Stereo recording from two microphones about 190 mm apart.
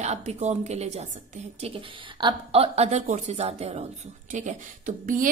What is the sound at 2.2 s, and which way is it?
A woman's voice, 30° right (ahead or behind).